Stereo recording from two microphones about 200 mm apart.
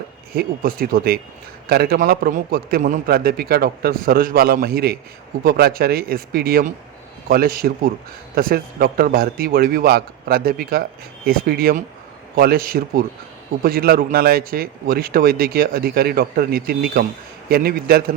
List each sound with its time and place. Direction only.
0.3 s speech: 45° right (ahead or behind)